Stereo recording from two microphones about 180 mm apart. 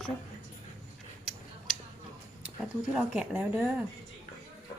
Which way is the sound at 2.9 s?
5° right (ahead or behind).